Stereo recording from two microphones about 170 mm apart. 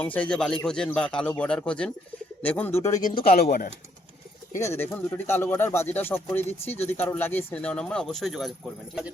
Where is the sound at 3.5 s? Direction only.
45° left (ahead or behind).